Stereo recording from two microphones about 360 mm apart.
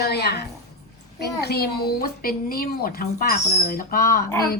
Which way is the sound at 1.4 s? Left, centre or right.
Left.